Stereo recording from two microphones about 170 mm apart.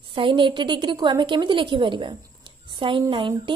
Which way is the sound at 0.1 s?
30° right (ahead or behind).